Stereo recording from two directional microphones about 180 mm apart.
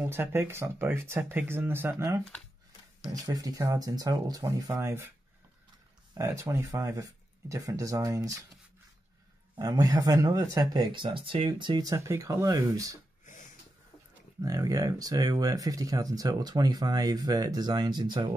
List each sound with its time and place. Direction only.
0.0 s speech: 15° right (ahead or behind)
6.1 s speech: 15° right (ahead or behind)
9.6 s speech: 20° right (ahead or behind)
13.2 s a sound: 45° left (ahead or behind)
14.4 s speech: 20° right (ahead or behind)